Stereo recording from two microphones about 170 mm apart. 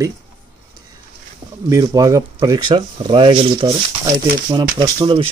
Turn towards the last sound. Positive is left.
turn(degrees=-30)  # may be behind; listen again after turning